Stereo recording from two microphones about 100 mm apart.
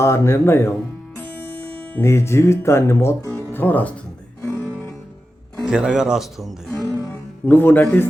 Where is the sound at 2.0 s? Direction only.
25° left (ahead or behind).